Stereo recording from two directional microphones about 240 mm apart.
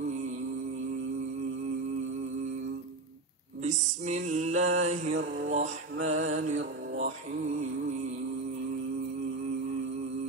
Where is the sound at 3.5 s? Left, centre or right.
Right.